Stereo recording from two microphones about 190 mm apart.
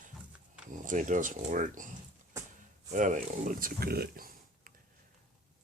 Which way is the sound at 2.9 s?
40° right (ahead or behind).